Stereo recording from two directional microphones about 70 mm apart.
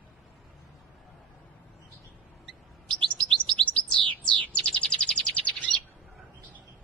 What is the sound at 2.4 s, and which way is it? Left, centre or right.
Chirp, centre.